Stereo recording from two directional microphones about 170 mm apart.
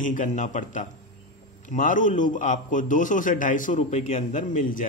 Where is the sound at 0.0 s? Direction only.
50° left (ahead or behind).